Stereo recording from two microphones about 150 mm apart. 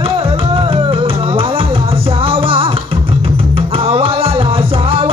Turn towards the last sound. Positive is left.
turn(degrees=-40)  # may be behind; listen again after turning